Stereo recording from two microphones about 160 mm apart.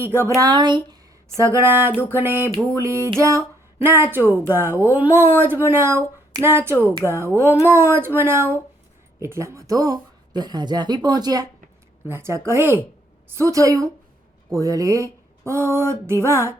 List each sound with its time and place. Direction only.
0.0 s a woman's voice: 15° right (ahead or behind)
0.3 s a woman's voice: 25° right (ahead or behind)